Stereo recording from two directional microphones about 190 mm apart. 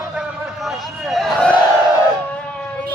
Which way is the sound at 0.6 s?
Centre (ahead or behind).